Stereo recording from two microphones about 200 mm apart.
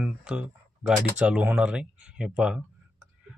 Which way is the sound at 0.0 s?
5° right (ahead or behind).